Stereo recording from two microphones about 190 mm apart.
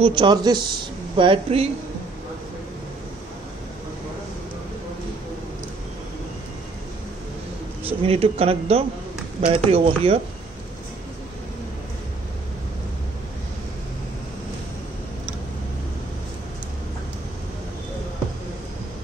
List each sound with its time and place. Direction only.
0.0 s speech: 25° right (ahead or behind)
7.8 s speech: 30° right (ahead or behind)